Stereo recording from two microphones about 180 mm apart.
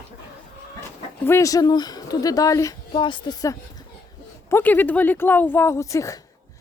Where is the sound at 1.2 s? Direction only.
15° left (ahead or behind).